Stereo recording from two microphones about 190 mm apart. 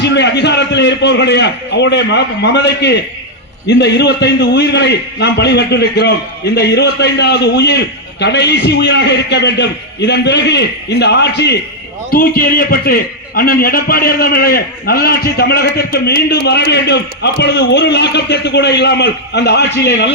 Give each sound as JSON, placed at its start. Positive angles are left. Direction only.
{"t": 0.0, "sound": "a man's voice", "side_deg": 65}
{"t": 12.1, "sound": "a man's voice", "side_deg": 50}